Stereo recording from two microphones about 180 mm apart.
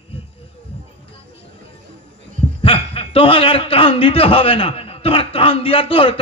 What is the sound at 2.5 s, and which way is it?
A man's voice, 30° left (ahead or behind).